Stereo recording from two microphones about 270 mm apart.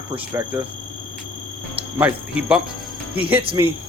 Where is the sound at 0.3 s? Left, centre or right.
Centre.